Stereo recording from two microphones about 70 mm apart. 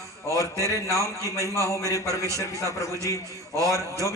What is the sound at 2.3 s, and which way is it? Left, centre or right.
Speech, right.